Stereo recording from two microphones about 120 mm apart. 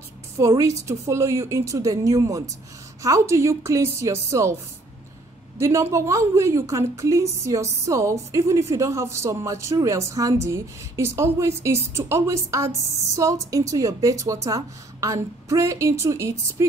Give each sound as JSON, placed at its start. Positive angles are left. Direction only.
{"t": 0.4, "sound": "a woman's voice", "side_deg": -25}
{"t": 5.6, "sound": "a woman's voice", "side_deg": -25}